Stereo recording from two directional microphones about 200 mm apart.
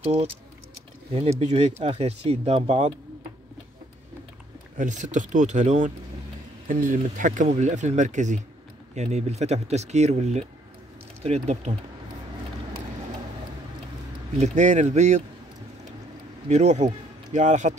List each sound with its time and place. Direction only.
0.0 s speech: 30° right (ahead or behind)
1.5 s speech: 30° right (ahead or behind)
4.7 s speech: 40° right (ahead or behind)
14.4 s speech: 35° right (ahead or behind)
16.4 s a man's voice: 35° right (ahead or behind)